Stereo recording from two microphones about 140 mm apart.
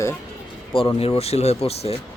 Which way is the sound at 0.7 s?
40° left (ahead or behind).